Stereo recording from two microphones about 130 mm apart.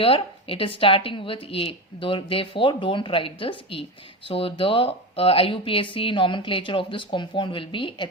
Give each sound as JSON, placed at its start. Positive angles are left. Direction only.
{"t": 0.0, "sound": "a woman's voice", "side_deg": 45}